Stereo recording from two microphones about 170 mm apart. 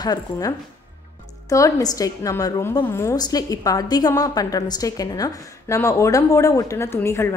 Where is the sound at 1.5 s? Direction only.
20° left (ahead or behind).